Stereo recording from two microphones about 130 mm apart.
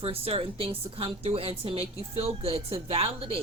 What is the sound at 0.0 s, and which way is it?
A woman's voice, 50° right (ahead or behind).